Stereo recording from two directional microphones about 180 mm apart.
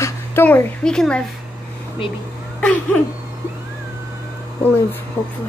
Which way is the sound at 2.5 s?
5° left (ahead or behind).